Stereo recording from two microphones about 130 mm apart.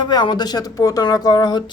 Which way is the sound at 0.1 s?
30° left (ahead or behind).